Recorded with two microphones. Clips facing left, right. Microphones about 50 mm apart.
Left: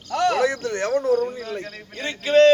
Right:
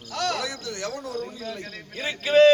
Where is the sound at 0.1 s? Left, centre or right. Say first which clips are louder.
Left 7 dB; left.